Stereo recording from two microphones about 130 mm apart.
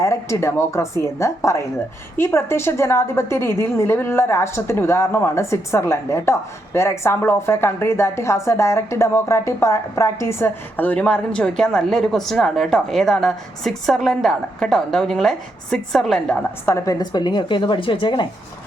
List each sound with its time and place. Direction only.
0.0 s a woman's voice: 20° left (ahead or behind); by 16.4 s 5° left (ahead or behind)
16.6 s a woman's voice: 25° left (ahead or behind); by 18.3 s 40° left (ahead or behind)